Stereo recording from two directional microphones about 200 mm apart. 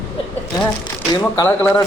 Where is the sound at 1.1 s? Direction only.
20° left (ahead or behind).